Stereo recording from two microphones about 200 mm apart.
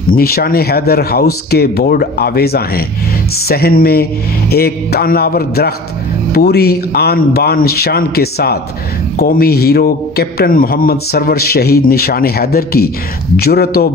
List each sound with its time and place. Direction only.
0.1 s a man's voice: 50° left (ahead or behind)